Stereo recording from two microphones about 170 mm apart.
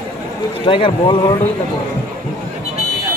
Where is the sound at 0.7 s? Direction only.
30° left (ahead or behind).